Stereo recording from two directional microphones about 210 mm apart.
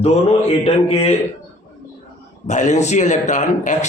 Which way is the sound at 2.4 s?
35° left (ahead or behind).